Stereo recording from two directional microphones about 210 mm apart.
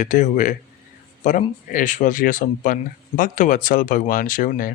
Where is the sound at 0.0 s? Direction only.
35° left (ahead or behind).